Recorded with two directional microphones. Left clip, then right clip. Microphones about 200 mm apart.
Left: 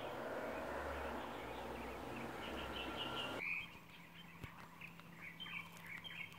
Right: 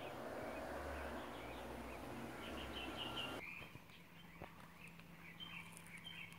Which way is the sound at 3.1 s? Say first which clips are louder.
Left 3 dB; 40° left (ahead or behind).